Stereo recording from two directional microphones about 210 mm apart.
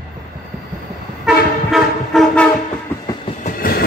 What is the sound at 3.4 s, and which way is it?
Train, 45° left (ahead or behind).